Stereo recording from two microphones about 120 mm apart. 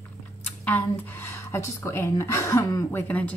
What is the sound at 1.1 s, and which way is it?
Speech, 25° left (ahead or behind).